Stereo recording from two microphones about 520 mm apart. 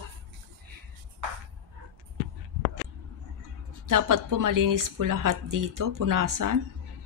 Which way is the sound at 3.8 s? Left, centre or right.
Right.